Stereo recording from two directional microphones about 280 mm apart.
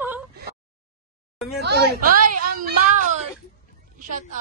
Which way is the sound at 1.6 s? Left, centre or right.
Right.